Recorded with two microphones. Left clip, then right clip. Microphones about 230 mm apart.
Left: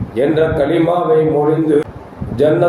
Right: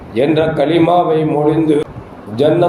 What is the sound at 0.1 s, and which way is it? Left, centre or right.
A man's voice, right.